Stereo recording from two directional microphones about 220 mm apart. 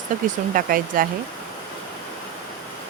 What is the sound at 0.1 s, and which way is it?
Speech, 35° right (ahead or behind).